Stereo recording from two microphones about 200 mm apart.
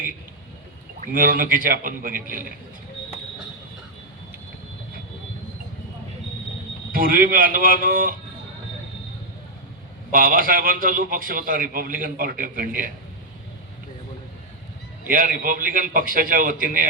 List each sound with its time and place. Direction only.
1.0 s a man's voice: 45° right (ahead or behind)
6.9 s a man's voice: 45° right (ahead or behind)
10.1 s a man's voice: 45° right (ahead or behind)
15.0 s a man's voice: 45° right (ahead or behind)